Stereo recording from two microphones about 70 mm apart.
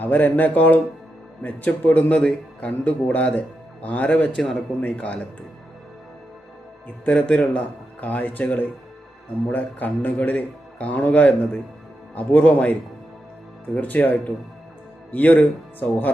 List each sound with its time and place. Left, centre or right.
0.0 s speech: left
7.0 s speech: centre
13.8 s speech: left